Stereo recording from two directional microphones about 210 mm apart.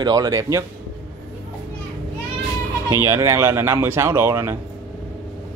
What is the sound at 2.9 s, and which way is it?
Speech, 15° right (ahead or behind).